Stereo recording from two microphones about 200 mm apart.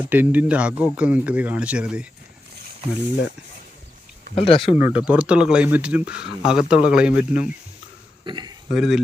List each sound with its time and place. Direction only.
0.0 s speech: 10° right (ahead or behind)
4.4 s speech: 25° left (ahead or behind)
4.8 s speech: 5° right (ahead or behind)
8.2 s a man's voice: 25° right (ahead or behind)
8.7 s speech: centre (ahead or behind)